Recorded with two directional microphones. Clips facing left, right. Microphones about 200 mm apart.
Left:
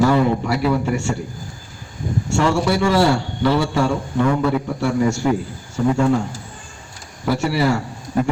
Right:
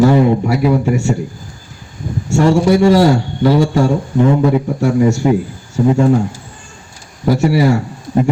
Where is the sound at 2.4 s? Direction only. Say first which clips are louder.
Right 8 dB; 40° right (ahead or behind).